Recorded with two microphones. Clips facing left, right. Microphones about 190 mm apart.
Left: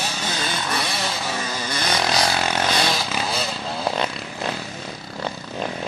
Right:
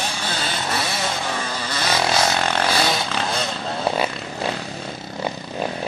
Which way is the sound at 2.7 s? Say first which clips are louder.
Right 1 dB; 5° right (ahead or behind).